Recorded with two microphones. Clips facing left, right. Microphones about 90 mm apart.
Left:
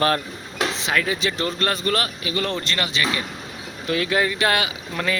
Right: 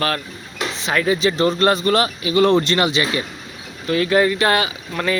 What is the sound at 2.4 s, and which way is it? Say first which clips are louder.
Speech: right 12 dB; 30° right (ahead or behind).